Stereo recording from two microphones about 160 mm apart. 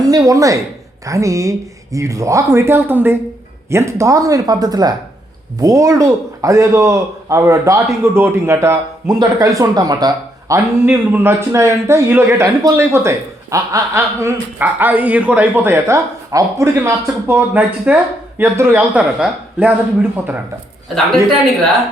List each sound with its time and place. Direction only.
0.1 s a man's voice: 20° right (ahead or behind)
10.5 s speech: 10° right (ahead or behind)